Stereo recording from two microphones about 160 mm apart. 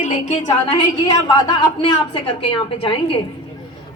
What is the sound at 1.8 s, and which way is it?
A woman's voice, 35° left (ahead or behind).